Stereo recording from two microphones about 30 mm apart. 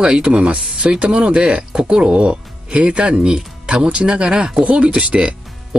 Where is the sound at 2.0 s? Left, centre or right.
Right.